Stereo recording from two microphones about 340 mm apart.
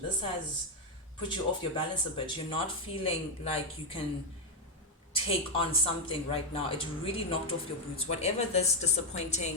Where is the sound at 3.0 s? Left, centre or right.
Centre.